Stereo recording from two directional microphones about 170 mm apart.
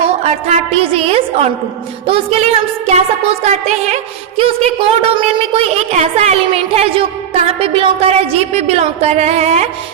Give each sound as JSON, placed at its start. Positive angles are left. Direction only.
{"t": 0.2, "sound": "music", "side_deg": -40}